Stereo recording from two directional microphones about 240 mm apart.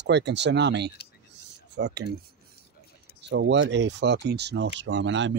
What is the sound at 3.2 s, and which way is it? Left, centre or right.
Speech, right.